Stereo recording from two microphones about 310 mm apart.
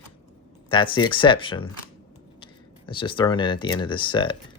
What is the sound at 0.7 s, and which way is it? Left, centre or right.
Speech, centre.